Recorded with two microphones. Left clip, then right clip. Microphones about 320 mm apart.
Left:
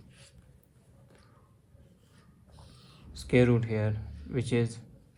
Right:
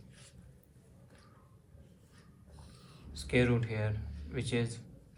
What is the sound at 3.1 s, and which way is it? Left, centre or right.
Speech, left.